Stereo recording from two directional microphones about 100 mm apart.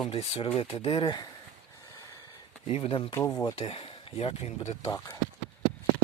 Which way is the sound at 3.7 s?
70° left (ahead or behind).